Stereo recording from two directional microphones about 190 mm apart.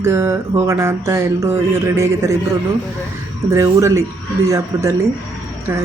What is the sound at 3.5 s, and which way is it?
Speech, 15° right (ahead or behind).